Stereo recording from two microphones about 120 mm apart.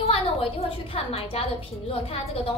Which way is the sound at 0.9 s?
55° left (ahead or behind).